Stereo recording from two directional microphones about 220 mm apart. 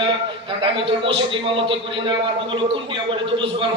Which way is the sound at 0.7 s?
20° right (ahead or behind).